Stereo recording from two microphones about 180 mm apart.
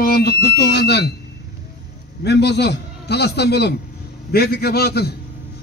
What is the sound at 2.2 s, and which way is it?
A man's voice, 65° left (ahead or behind).